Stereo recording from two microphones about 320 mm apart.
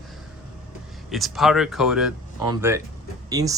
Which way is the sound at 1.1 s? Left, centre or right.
Centre.